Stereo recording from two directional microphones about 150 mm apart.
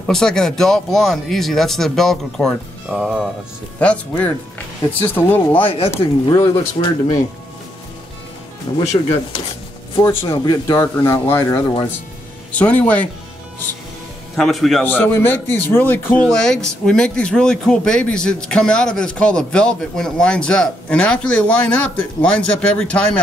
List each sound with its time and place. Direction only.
0.0 s speech: 5° left (ahead or behind)
3.8 s speech: 10° left (ahead or behind)
6.2 s speech: 25° left (ahead or behind)
8.7 s speech: 35° left (ahead or behind)
10.7 s speech: 20° left (ahead or behind)
14.3 s speech: centre (ahead or behind)
14.9 s speech: 15° left (ahead or behind)